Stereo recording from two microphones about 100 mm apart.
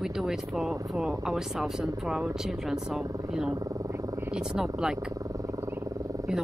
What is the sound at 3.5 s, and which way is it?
Speech, 35° right (ahead or behind).